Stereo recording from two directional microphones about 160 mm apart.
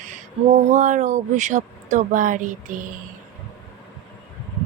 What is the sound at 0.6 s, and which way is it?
Speech, 50° right (ahead or behind).